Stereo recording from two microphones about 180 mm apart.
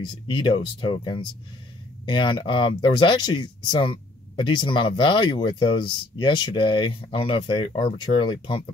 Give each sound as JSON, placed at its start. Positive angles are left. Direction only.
{"t": 0.3, "sound": "speech", "side_deg": 30}